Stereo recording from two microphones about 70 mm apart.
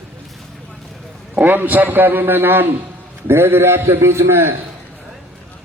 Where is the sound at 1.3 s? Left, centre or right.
Right.